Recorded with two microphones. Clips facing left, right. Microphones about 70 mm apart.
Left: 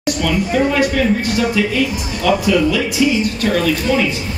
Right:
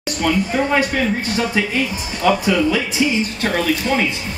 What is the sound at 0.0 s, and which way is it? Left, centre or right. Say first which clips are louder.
Speech: left 1 dB; right.